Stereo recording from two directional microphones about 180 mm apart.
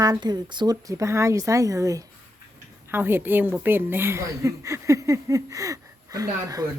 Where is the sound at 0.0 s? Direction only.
20° right (ahead or behind).